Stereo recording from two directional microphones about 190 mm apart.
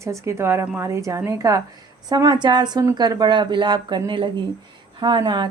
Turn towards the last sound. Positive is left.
turn(degrees=-20)  # may be behind; listen again after turning